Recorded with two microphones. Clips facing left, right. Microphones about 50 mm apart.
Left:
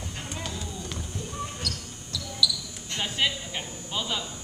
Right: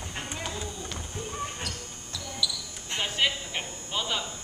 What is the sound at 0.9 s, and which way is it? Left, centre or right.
Basketball bounce, right.